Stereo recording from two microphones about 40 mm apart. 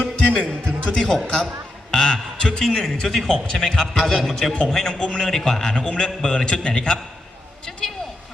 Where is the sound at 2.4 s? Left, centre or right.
Centre.